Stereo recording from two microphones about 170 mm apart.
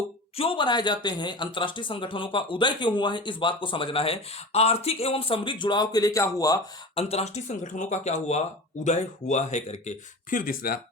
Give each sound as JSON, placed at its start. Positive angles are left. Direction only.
{"t": 0.3, "sound": "speech", "side_deg": 30}
{"t": 6.9, "sound": "speech", "side_deg": 35}